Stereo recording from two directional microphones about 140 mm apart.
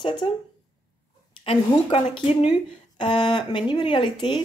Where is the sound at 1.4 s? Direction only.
45° left (ahead or behind).